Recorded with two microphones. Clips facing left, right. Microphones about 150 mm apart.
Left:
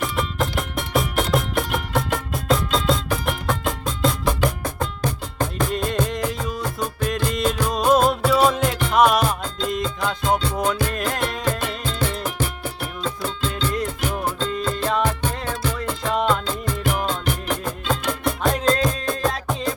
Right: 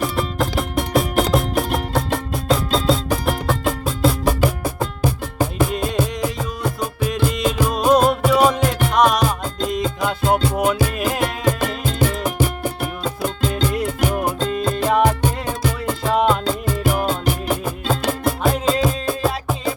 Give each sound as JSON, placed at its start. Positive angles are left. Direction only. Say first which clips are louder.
{"t": 0.0, "sound": "music", "louder": "right 3 dB", "side_deg": 0}
{"t": 8.5, "sound": "music", "louder": "right 1 dB", "side_deg": 0}
{"t": 10.0, "sound": "music", "louder": "right 4 dB", "side_deg": -10}
{"t": 18.0, "sound": "music", "louder": "right 4 dB", "side_deg": -35}
{"t": 18.4, "sound": "music", "louder": "right 1 dB", "side_deg": -5}